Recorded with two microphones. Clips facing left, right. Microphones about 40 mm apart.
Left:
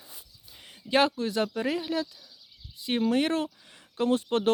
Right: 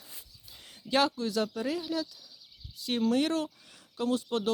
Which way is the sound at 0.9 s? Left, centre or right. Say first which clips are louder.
Left 3 dB; left.